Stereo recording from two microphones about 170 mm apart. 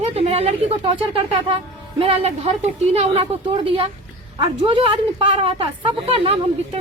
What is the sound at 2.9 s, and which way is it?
Speech, 35° right (ahead or behind).